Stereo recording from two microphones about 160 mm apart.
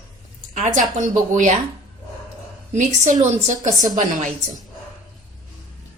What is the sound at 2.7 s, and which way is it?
A woman's voice, 45° right (ahead or behind).